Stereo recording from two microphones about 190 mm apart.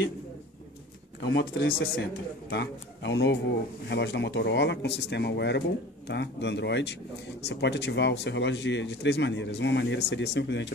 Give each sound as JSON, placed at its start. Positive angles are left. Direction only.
{"t": 1.3, "sound": "speech", "side_deg": 55}
{"t": 2.5, "sound": "speech", "side_deg": 65}